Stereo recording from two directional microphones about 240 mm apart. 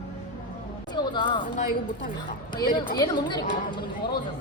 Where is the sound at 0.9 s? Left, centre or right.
Centre.